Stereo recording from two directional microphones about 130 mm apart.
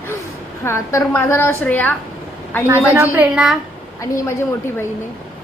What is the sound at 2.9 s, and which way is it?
Speech, 15° right (ahead or behind).